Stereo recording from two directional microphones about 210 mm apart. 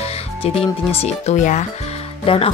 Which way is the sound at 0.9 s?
30° left (ahead or behind).